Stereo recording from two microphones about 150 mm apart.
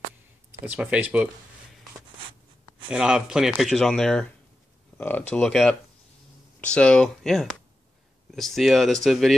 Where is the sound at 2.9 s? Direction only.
5° right (ahead or behind).